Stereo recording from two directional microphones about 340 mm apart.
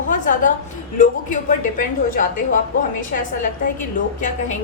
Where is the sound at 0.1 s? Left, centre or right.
Left.